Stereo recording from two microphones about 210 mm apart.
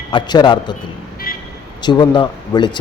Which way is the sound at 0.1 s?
20° left (ahead or behind).